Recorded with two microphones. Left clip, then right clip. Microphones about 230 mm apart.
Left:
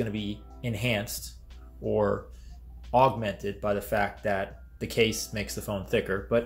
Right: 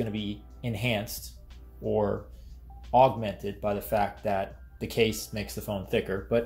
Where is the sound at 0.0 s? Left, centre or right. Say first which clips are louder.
Left 1 dB; centre.